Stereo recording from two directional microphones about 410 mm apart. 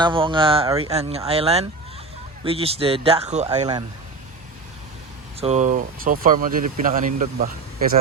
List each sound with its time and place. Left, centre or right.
0.0 s a man's voice: centre
5.4 s speech: centre